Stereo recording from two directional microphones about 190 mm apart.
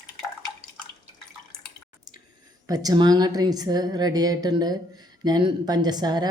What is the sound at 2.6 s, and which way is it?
A woman's voice, 20° right (ahead or behind).